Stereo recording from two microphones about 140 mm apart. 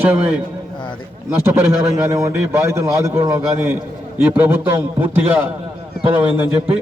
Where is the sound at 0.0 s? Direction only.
10° right (ahead or behind).